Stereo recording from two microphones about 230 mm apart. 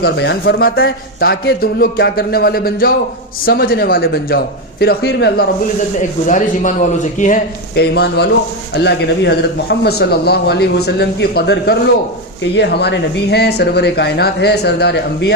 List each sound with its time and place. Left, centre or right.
0.0 s a man's voice: left
6.0 s a man's voice: left